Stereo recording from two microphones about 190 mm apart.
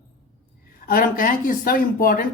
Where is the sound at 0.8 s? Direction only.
50° left (ahead or behind).